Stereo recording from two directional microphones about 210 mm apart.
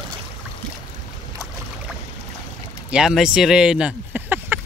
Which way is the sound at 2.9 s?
5° right (ahead or behind).